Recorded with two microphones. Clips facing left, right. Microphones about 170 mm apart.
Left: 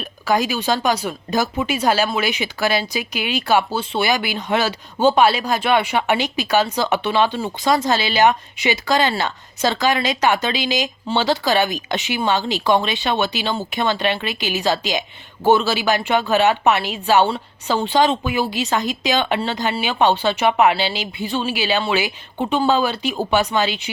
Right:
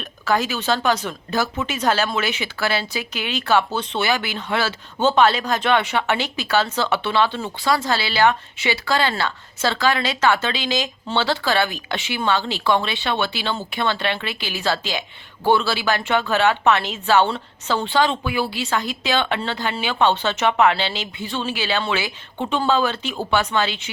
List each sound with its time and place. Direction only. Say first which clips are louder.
0.0 s speech: left 2 dB; 15° left (ahead or behind)